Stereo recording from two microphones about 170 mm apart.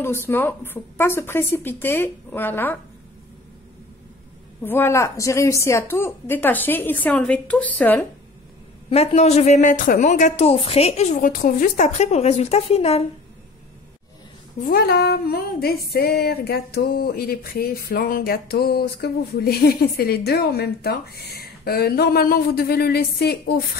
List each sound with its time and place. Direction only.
0.3 s a woman's voice: 10° left (ahead or behind)
4.6 s a woman's voice: 15° left (ahead or behind)
8.9 s a woman's voice: 40° left (ahead or behind)
14.6 s speech: 60° left (ahead or behind)